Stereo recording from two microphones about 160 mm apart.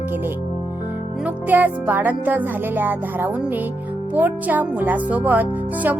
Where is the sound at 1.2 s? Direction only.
10° right (ahead or behind).